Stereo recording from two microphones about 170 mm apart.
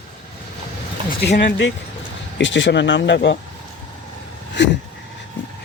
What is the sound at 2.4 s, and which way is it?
Speech, 90° left.